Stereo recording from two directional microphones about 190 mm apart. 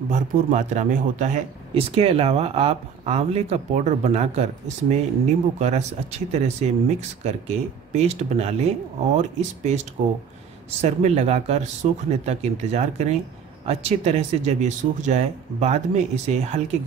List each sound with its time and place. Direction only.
0.1 s speech: 40° right (ahead or behind)